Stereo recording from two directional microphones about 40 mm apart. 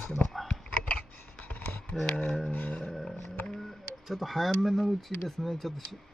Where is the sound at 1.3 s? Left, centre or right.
Left.